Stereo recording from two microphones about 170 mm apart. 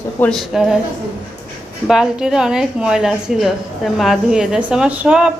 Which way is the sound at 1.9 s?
5° right (ahead or behind).